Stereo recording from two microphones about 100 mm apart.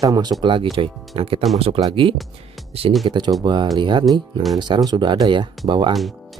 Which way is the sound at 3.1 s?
45° right (ahead or behind).